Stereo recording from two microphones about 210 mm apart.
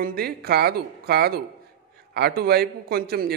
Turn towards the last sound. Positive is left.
turn(degrees=-45)  # may be behind; listen again after turning